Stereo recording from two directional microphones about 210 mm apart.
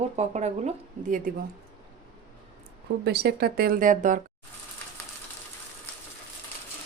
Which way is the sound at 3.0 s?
50° right (ahead or behind).